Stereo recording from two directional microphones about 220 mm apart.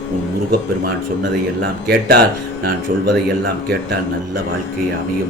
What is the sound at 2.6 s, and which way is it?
Speech, 50° right (ahead or behind).